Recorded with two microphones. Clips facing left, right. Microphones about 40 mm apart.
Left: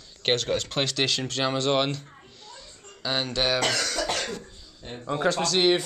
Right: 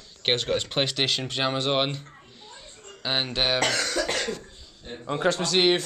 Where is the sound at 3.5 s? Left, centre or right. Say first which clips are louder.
Right 1 dB; right.